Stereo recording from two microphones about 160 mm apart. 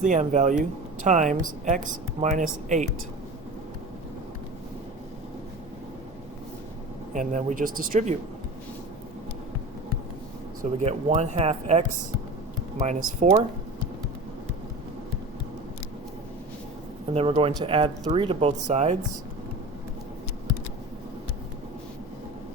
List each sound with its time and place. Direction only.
0.0 s speech: 50° right (ahead or behind)
7.1 s speech: 55° right (ahead or behind)
10.6 s speech: 45° right (ahead or behind)
12.8 s speech: 50° right (ahead or behind)
17.2 s speech: 35° right (ahead or behind)